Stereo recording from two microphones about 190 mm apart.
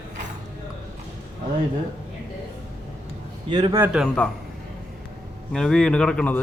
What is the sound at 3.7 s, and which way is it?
Speech, 10° right (ahead or behind).